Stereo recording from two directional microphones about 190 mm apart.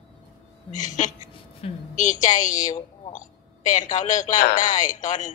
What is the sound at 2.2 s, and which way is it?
A woman's voice, 40° left (ahead or behind).